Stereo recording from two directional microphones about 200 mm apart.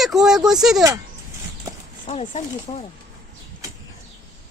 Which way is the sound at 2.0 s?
30° left (ahead or behind).